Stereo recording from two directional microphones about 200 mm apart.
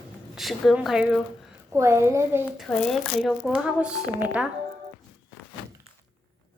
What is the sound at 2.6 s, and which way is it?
Speech, 5° left (ahead or behind).